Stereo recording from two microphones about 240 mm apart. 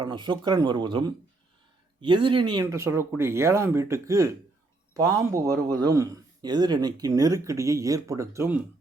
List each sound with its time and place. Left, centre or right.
0.0 s a man's voice: centre